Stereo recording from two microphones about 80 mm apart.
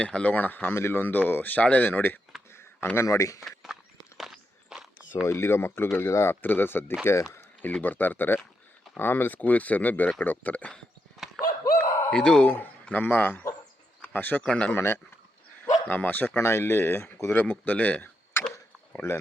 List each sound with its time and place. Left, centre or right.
0.0 s speech: centre
2.3 s a sound: centre
2.9 s speech: left
3.4 s a sound: centre
4.2 s walk: centre
5.2 s speech: left
7.3 s speech: left
11.2 s a sound: centre
12.1 s speech: centre
12.5 s speech: left
14.8 s speech: left
18.3 s a sound: left
18.9 s speech: left